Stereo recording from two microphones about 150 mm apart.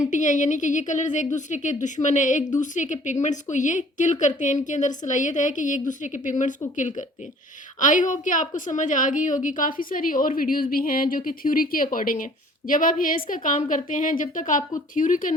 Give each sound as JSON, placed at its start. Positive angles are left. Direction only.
{"t": 0.0, "sound": "a woman's voice", "side_deg": 55}
{"t": 7.8, "sound": "a woman's voice", "side_deg": 60}